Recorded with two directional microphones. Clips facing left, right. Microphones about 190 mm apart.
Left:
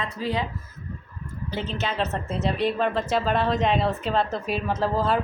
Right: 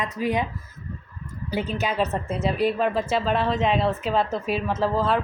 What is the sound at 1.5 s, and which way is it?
A woman's voice, 10° right (ahead or behind).